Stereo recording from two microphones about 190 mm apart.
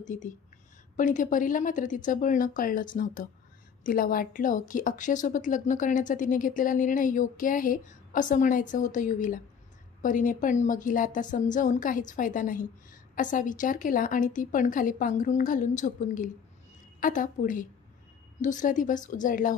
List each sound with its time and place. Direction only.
0.0 s a woman's voice: 40° left (ahead or behind)